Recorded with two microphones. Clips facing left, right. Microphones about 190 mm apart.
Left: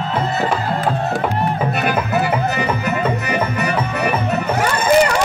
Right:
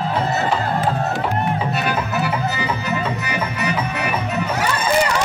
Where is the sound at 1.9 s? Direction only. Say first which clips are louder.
Left 3 dB; 55° left (ahead or behind).